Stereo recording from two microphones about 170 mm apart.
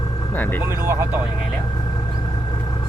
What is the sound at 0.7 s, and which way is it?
Speech, 15° right (ahead or behind).